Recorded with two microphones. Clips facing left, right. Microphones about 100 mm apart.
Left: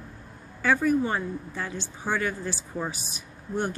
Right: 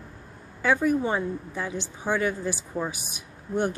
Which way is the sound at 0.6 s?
15° right (ahead or behind).